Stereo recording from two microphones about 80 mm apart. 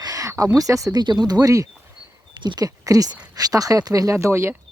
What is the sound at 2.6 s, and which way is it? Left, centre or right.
Speech, right.